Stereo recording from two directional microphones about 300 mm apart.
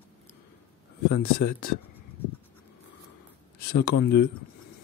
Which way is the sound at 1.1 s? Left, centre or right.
Left.